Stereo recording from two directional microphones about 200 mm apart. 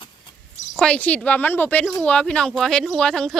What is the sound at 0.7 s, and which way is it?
Speech, 5° left (ahead or behind).